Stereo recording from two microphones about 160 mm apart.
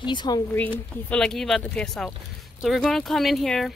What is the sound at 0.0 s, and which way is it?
Speech, 30° left (ahead or behind).